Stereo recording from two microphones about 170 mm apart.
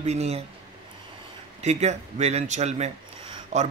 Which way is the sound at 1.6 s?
40° right (ahead or behind).